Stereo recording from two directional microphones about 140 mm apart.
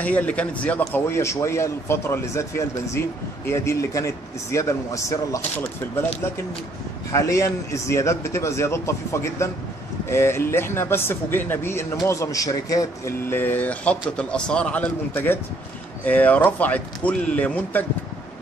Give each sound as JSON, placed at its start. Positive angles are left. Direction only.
{"t": 0.0, "sound": "a man's voice", "side_deg": 10}
{"t": 7.1, "sound": "a man's voice", "side_deg": 20}